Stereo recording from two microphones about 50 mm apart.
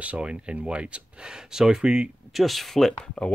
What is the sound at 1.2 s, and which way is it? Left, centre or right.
Speech, centre.